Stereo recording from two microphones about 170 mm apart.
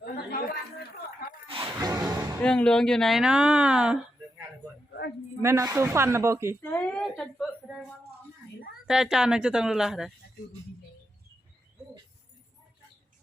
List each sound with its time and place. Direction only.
0.0 s chatter: 65° left (ahead or behind)
1.5 s a sound: 25° right (ahead or behind)
2.4 s a woman's voice: 5° left (ahead or behind)
4.9 s a sound: 75° left (ahead or behind)
5.4 s speech: 15° right (ahead or behind)
6.6 s speech: 10° left (ahead or behind)
8.9 s a woman's voice: 5° right (ahead or behind)